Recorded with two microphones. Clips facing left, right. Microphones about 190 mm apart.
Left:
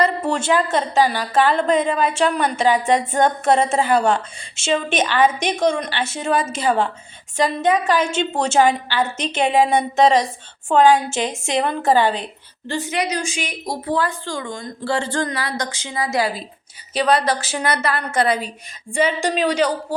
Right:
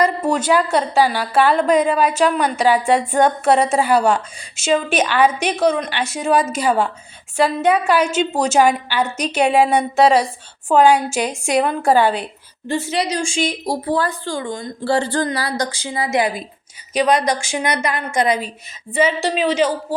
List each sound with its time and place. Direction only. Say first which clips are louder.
0.4 s a woman's voice: right 1 dB; 10° right (ahead or behind)
11.1 s a woman's voice: right 2 dB; 20° left (ahead or behind)
11.9 s a woman's voice: right 1 dB; 10° right (ahead or behind)
12.6 s a woman's voice: right 2 dB; 25° right (ahead or behind); by 19.7 s 5° right (ahead or behind)